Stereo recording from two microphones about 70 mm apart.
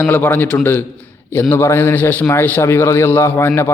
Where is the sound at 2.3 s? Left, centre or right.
Left.